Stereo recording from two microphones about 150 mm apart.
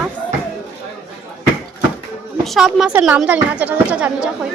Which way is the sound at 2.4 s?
Centre (ahead or behind).